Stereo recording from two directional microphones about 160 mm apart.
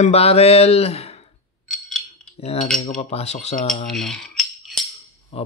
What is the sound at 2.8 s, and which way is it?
Speech, 40° left (ahead or behind).